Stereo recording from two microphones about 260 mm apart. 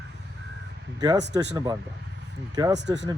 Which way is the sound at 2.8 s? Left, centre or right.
Right.